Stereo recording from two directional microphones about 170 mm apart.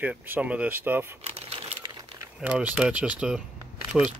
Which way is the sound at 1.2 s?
35° right (ahead or behind).